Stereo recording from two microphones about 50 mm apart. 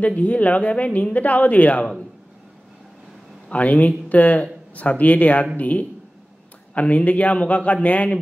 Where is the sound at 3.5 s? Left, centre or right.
Left.